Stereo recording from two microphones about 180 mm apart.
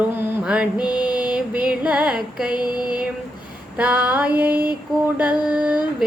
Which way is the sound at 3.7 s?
10° right (ahead or behind).